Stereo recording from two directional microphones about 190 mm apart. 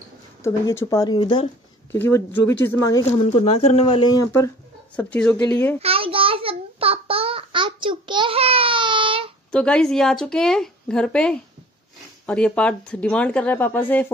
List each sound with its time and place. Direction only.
0.4 s speech: 15° left (ahead or behind)
1.9 s speech: 10° left (ahead or behind)
3.2 s speech: 35° left (ahead or behind); by 5.8 s 15° left (ahead or behind)
5.8 s a sound: 30° right (ahead or behind)
9.5 s speech: 5° left (ahead or behind)